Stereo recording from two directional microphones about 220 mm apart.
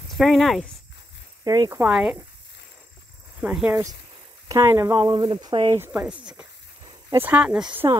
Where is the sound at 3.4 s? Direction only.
5° right (ahead or behind).